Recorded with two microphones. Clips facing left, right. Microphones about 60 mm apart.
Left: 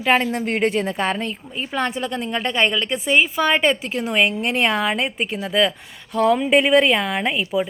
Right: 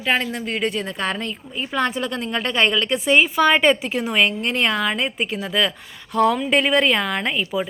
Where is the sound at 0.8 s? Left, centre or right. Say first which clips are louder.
Left 3 dB; left; by 4.1 s centre.